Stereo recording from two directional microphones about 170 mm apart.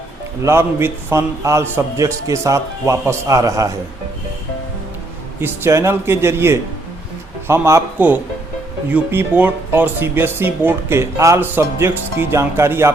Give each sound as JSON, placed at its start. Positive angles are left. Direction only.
{"t": 0.4, "sound": "speech", "side_deg": -15}
{"t": 5.4, "sound": "speech", "side_deg": -15}